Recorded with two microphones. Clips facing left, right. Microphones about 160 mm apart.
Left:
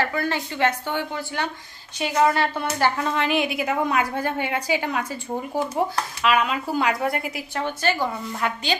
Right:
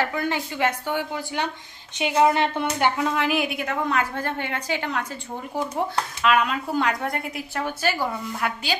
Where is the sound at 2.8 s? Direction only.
10° right (ahead or behind).